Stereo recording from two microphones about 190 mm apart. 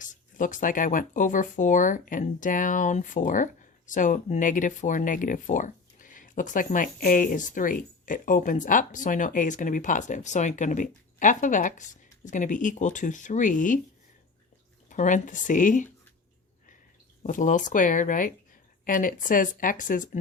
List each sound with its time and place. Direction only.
0.0 s speech: 45° left (ahead or behind)
14.8 s speech: 40° left (ahead or behind)
17.2 s speech: 40° left (ahead or behind)